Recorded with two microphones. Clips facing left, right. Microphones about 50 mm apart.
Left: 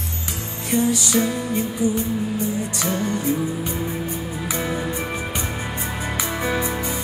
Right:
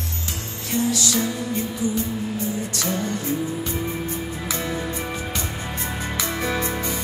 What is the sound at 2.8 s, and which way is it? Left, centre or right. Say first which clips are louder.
Music: left 2 dB; left.